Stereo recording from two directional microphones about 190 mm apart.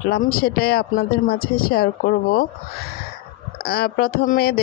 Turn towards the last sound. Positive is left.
turn(degrees=50)  # may be behind; listen again after turning